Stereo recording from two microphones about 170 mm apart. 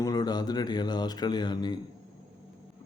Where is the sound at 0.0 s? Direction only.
25° left (ahead or behind).